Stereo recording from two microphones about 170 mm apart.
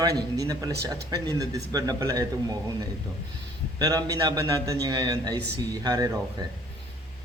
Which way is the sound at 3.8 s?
20° right (ahead or behind).